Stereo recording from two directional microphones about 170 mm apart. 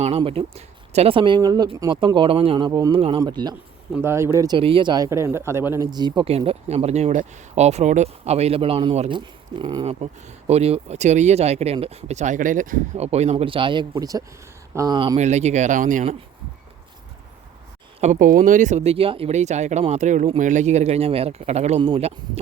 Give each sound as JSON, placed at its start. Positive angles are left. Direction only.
{"t": 0.2, "sound": "speech", "side_deg": -35}
{"t": 3.9, "sound": "speech", "side_deg": -15}
{"t": 4.5, "sound": "speech", "side_deg": -30}
{"t": 5.9, "sound": "speech", "side_deg": -25}
{"t": 6.3, "sound": "speech", "side_deg": -35}
{"t": 9.8, "sound": "speech", "side_deg": -40}
{"t": 13.0, "sound": "speech", "side_deg": -40}
{"t": 15.1, "sound": "speech", "side_deg": -40}
{"t": 18.0, "sound": "speech", "side_deg": -50}